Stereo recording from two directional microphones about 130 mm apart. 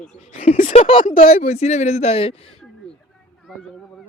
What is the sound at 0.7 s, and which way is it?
Speech, 45° left (ahead or behind).